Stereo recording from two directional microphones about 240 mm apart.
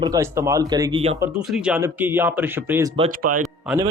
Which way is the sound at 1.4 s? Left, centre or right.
Centre.